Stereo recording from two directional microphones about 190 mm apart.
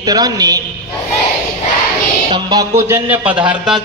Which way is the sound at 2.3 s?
15° right (ahead or behind).